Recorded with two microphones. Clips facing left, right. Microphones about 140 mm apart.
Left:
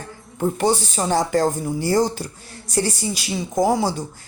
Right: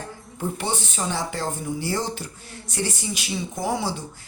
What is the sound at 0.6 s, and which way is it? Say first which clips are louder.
A woman's voice: left 9 dB; 35° left (ahead or behind).